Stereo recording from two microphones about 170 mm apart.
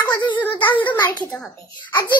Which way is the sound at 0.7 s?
10° left (ahead or behind).